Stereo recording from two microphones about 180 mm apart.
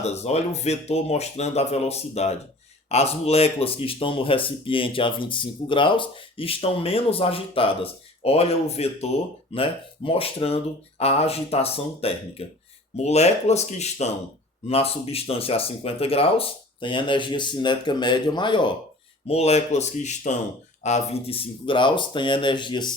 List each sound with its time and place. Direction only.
0.0 s speech: 35° left (ahead or behind)